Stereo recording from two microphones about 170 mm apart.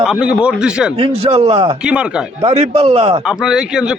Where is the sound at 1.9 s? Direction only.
5° right (ahead or behind).